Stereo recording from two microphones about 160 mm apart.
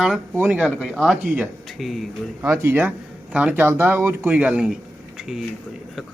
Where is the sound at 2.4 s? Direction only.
10° right (ahead or behind).